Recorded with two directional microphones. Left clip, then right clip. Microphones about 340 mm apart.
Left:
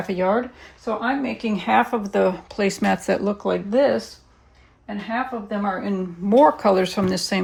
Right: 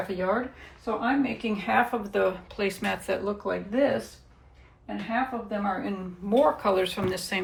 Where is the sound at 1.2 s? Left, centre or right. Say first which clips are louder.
Left 3 dB; left.